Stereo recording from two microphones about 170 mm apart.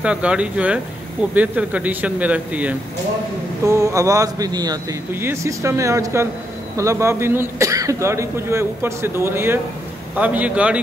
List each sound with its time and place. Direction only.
0.0 s a man's voice: 5° right (ahead or behind)